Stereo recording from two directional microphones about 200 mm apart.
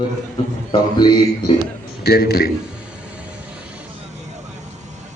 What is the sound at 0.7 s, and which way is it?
Speech, 25° left (ahead or behind).